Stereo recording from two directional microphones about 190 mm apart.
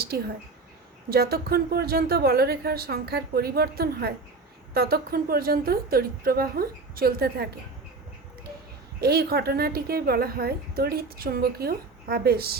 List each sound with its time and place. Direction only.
0.1 s a woman's voice: 55° right (ahead or behind)
9.0 s a woman's voice: 55° right (ahead or behind)